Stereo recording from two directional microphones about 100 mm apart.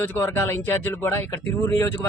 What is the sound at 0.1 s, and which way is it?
Speech, 20° left (ahead or behind).